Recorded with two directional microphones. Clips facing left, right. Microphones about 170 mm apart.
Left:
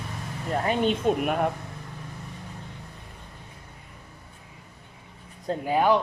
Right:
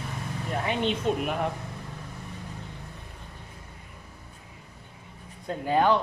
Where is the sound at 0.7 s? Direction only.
45° left (ahead or behind).